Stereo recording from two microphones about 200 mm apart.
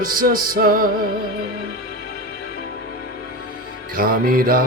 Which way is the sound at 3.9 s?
45° right (ahead or behind).